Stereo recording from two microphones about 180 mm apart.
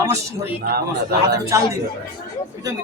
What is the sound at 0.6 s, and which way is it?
Speech, 60° right (ahead or behind).